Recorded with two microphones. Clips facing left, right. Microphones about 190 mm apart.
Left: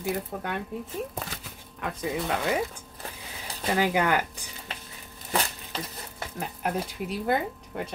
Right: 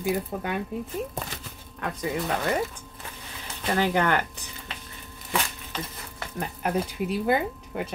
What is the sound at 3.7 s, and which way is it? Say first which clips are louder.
Speech: right 1 dB; 10° left (ahead or behind).